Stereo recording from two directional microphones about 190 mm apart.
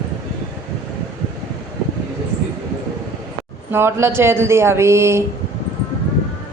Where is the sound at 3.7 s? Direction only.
15° right (ahead or behind).